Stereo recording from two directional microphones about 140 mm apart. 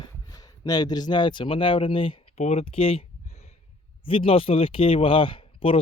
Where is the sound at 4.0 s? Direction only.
40° left (ahead or behind).